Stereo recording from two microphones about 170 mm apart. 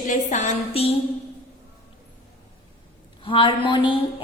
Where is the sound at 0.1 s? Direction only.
45° left (ahead or behind).